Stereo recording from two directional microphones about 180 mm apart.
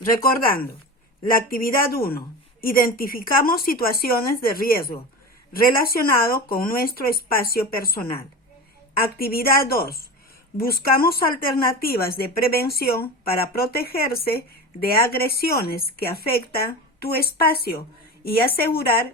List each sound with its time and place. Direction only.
0.2 s speech: 55° left (ahead or behind)
9.1 s speech: 55° left (ahead or behind)